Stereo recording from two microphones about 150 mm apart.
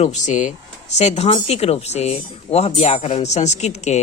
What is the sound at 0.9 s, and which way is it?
A man's voice, 45° left (ahead or behind).